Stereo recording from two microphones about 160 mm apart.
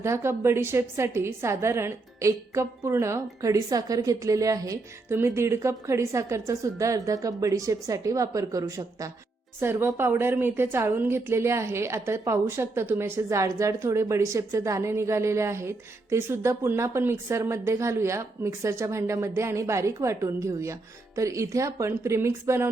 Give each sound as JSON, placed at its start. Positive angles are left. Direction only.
{"t": 0.0, "sound": "a woman's voice", "side_deg": -15}